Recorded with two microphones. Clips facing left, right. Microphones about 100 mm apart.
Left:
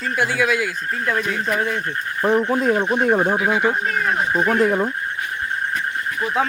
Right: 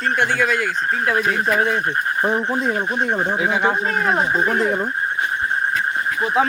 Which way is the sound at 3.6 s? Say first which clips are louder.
Right 1 dB; 35° right (ahead or behind).